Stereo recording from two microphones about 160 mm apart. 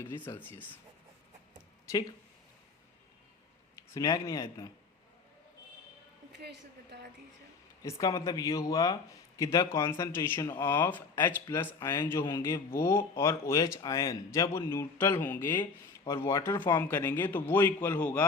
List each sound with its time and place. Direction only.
0.3 s speech: 15° left (ahead or behind)
1.9 s speech: 20° left (ahead or behind)
3.9 s speech: 20° left (ahead or behind)
6.4 s a woman's voice: 90° right
8.0 s speech: 20° left (ahead or behind)